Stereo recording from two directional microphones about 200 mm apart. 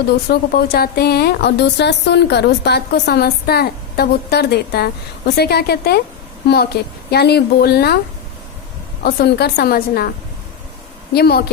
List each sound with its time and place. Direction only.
0.3 s a woman's voice: 50° left (ahead or behind)
7.1 s a woman's voice: 55° left (ahead or behind)
9.0 s a woman's voice: 55° left (ahead or behind)
11.1 s a woman's voice: 50° left (ahead or behind)